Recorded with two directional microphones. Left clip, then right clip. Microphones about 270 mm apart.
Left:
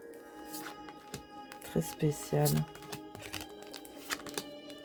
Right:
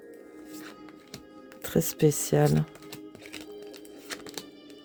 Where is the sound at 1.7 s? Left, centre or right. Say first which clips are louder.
Right 10 dB; right.